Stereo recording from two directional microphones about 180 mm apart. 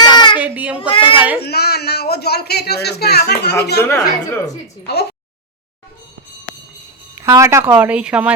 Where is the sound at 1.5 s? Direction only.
60° left (ahead or behind).